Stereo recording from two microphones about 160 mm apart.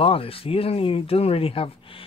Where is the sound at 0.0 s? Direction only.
35° left (ahead or behind).